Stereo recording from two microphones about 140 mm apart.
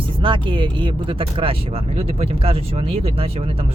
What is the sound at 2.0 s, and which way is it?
Speech, 45° right (ahead or behind).